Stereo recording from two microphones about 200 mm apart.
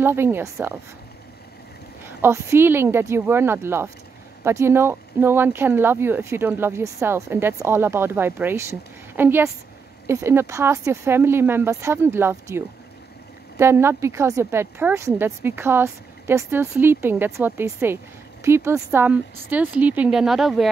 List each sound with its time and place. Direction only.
0.0 s speech: 10° right (ahead or behind)
2.0 s speech: 10° right (ahead or behind)